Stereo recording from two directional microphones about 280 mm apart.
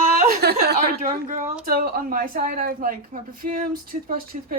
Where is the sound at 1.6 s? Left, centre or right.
Right.